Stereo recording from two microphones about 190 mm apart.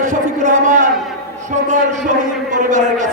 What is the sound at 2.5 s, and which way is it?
Speech, 40° right (ahead or behind).